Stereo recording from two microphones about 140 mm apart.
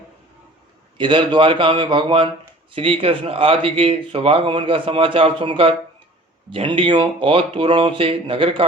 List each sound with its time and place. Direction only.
0.9 s speech: 35° right (ahead or behind)